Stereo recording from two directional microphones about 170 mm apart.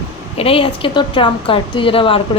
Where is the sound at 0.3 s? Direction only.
35° left (ahead or behind).